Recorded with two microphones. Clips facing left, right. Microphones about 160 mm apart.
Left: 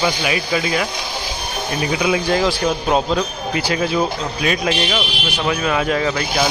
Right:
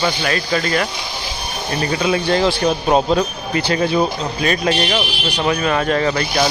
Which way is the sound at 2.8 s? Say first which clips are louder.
Right 3 dB; 10° right (ahead or behind).